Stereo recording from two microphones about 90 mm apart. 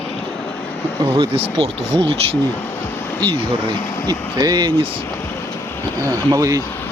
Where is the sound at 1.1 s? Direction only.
85° right.